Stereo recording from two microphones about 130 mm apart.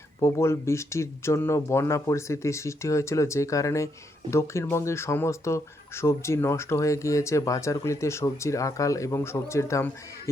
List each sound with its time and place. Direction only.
0.2 s speech: 20° left (ahead or behind)